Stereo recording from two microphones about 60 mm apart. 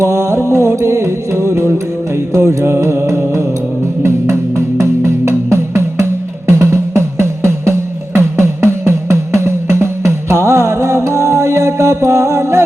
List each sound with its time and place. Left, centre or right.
0.0 s music: right